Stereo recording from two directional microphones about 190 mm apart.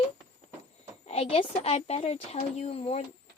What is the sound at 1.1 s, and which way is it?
Speech, 30° left (ahead or behind).